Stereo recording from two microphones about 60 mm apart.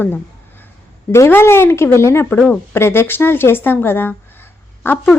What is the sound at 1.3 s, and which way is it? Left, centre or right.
Speech, left.